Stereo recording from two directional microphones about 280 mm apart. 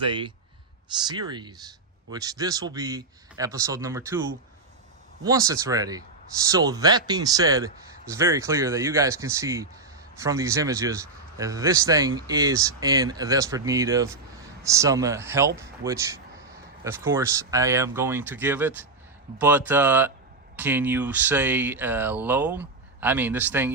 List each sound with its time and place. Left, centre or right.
0.0 s a man's voice: centre
5.2 s a man's voice: centre